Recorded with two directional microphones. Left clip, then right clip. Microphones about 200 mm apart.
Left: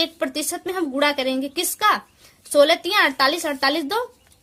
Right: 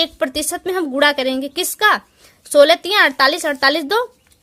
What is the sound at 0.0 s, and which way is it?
A woman's voice, 30° right (ahead or behind).